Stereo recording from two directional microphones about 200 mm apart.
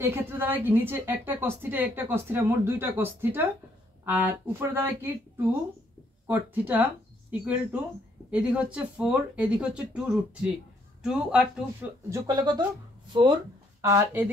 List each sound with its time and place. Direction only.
0.0 s a woman's voice: 10° right (ahead or behind)
6.2 s speech: 10° right (ahead or behind)
12.3 s speech: 20° right (ahead or behind)